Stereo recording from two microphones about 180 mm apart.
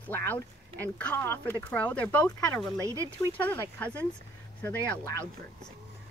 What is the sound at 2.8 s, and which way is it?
Speech, 15° right (ahead or behind).